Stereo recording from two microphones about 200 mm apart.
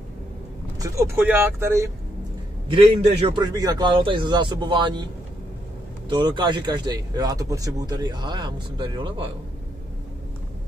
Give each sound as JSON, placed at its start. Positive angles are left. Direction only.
{"t": 0.7, "sound": "speech", "side_deg": -15}
{"t": 2.7, "sound": "speech", "side_deg": -30}
{"t": 6.0, "sound": "speech", "side_deg": -20}